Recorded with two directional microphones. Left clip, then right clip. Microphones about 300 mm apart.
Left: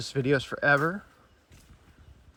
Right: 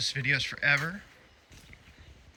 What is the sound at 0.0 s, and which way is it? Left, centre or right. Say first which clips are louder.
Speech: left 1 dB; centre.